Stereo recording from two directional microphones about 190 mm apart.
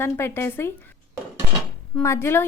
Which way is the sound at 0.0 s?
10° left (ahead or behind).